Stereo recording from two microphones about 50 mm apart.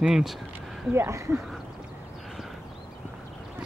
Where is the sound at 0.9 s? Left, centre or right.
Right.